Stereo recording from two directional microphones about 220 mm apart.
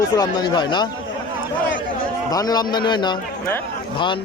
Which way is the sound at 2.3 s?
15° left (ahead or behind).